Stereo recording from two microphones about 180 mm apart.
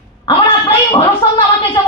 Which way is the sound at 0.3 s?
25° left (ahead or behind).